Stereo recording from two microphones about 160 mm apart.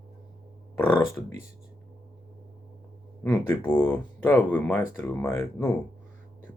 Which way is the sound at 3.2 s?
15° left (ahead or behind).